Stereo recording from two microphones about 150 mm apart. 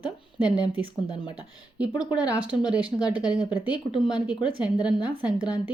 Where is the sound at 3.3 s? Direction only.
25° left (ahead or behind).